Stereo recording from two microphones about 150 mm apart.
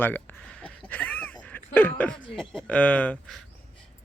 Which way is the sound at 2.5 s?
10° left (ahead or behind).